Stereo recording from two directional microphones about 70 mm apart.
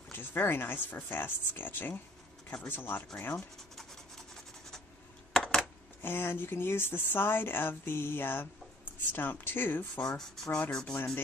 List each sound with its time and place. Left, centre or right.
0.1 s speech: left
5.3 s coin: centre
6.0 s speech: left
10.1 s speech: centre